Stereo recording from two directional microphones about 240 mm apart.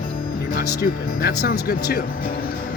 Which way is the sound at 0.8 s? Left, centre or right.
Left.